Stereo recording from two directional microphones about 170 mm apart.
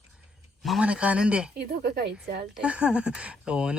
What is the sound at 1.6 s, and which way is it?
Speech, 70° right (ahead or behind).